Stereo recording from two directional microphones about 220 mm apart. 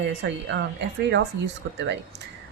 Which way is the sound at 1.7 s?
55° right (ahead or behind).